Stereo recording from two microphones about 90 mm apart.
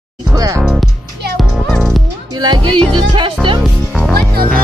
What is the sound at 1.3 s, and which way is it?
Music, centre (ahead or behind).